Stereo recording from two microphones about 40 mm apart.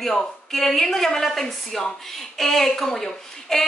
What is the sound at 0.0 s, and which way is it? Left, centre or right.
A woman's voice, centre.